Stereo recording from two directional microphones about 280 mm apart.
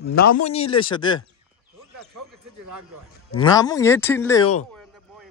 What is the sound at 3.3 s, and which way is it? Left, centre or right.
Speech, centre.